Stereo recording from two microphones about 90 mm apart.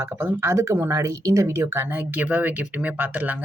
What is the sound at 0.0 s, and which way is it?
Speech, 25° right (ahead or behind).